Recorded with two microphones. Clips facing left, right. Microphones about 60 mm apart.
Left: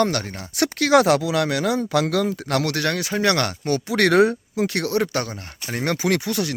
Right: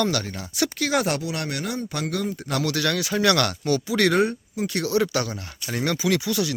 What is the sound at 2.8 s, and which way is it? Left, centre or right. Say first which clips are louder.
Speech: even; left.